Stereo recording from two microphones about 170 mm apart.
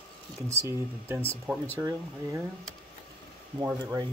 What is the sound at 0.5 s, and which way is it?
Speech, 15° right (ahead or behind).